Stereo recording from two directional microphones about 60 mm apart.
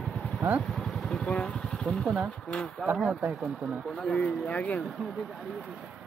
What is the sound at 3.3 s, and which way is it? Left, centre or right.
Speech, centre.